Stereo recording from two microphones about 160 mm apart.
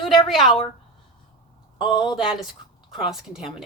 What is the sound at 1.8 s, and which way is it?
Speech, 30° left (ahead or behind).